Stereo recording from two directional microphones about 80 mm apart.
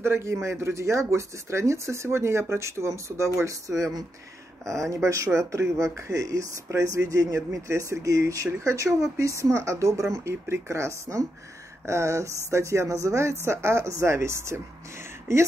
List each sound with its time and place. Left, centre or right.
0.0 s speech: right